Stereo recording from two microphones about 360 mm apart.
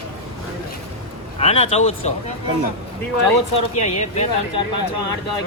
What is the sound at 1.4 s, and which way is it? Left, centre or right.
Speech, centre.